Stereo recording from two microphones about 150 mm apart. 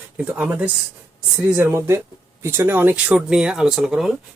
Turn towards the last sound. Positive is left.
turn(degrees=0)  # may be behind; listen again after turning